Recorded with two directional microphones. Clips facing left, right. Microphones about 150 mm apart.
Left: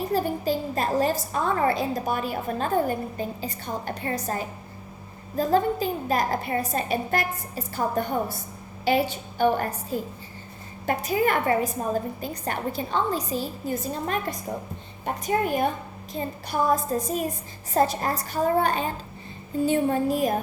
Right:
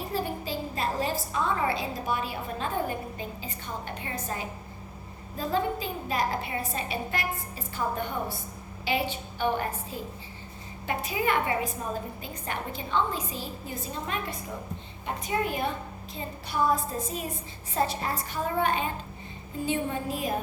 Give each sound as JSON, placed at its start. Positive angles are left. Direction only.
{"t": 0.1, "sound": "a woman's voice", "side_deg": 45}